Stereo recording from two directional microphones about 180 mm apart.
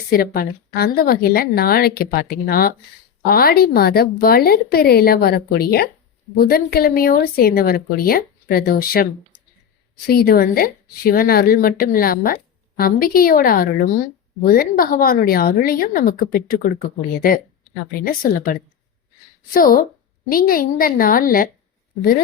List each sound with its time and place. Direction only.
0.1 s speech: 55° left (ahead or behind)
10.1 s speech: 60° left (ahead or behind)
18.0 s speech: 50° left (ahead or behind)
19.5 s speech: 50° left (ahead or behind)